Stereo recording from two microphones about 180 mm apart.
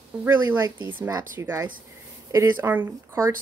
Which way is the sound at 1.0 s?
10° right (ahead or behind).